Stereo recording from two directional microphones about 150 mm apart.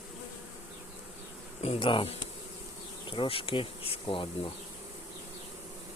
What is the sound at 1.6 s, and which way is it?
Speech, 40° left (ahead or behind).